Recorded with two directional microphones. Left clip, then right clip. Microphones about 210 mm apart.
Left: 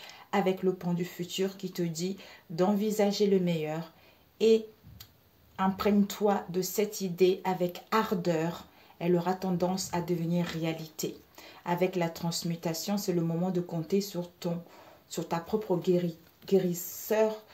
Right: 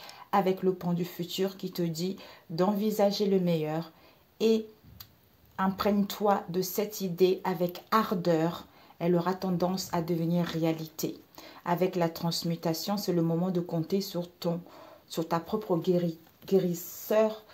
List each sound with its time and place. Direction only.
0.0 s speech: 25° right (ahead or behind)
5.6 s speech: 25° right (ahead or behind)